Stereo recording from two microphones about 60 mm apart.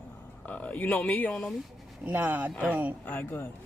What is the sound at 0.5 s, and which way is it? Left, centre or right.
Speech, left.